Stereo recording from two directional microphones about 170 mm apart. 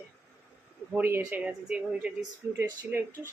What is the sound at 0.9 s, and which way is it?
Speech, 10° right (ahead or behind).